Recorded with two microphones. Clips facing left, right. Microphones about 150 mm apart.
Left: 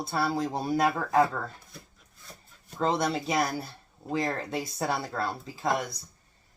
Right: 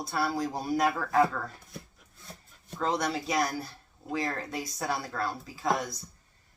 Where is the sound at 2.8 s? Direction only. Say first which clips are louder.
Left 3 dB; 30° left (ahead or behind).